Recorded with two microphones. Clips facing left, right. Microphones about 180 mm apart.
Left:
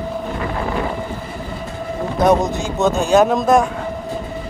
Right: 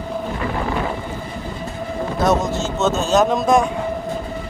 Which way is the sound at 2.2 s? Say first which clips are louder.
Left 3 dB; 15° left (ahead or behind).